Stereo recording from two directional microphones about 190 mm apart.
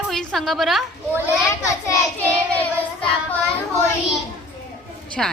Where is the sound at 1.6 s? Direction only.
15° left (ahead or behind).